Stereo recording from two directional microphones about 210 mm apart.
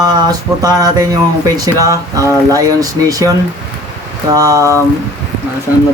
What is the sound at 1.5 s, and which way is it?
Speech, 15° right (ahead or behind).